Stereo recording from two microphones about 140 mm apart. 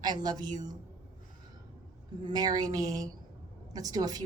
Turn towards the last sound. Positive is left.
turn(degrees=-30)  # may be behind; listen again after turning